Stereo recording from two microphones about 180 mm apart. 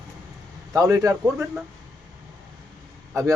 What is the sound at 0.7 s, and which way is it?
Speech, 20° right (ahead or behind).